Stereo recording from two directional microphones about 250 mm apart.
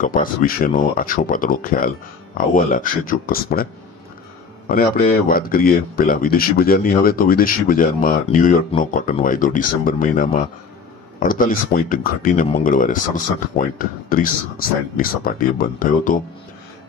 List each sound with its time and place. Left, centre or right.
0.0 s speech: left
4.6 s speech: left